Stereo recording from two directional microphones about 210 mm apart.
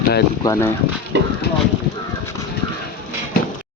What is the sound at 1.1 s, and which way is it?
Clip-clop, 55° right (ahead or behind).